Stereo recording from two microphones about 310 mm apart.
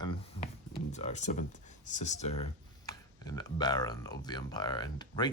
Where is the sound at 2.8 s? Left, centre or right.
Centre.